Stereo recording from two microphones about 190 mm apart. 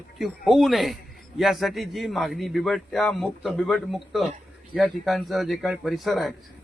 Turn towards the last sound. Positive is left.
turn(degrees=0)  # may be behind; listen again after turning